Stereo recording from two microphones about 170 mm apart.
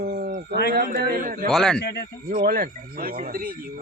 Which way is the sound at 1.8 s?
75° left (ahead or behind).